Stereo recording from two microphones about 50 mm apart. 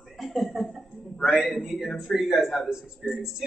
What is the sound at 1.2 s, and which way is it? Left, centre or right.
Speech, centre.